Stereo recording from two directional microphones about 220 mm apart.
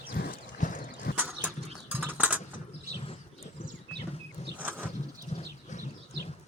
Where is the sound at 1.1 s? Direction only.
5° right (ahead or behind).